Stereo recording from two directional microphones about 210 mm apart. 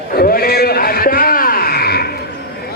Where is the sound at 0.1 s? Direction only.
45° left (ahead or behind).